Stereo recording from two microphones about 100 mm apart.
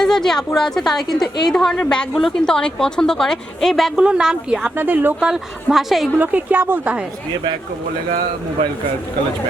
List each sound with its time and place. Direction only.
0.0 s a woman's voice: 5° left (ahead or behind)
3.9 s speech: 10° right (ahead or behind)
4.8 s speech: 20° right (ahead or behind)
5.2 s a woman's voice: 5° right (ahead or behind)
6.1 s speech: 15° right (ahead or behind)